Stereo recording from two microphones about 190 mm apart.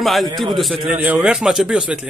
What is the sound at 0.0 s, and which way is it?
A man's voice, centre (ahead or behind).